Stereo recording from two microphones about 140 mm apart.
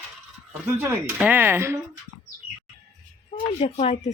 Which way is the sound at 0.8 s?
15° right (ahead or behind).